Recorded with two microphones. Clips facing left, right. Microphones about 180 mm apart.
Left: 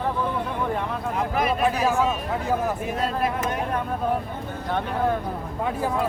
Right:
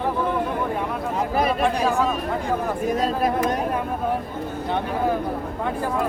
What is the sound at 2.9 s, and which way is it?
Speech, 40° right (ahead or behind).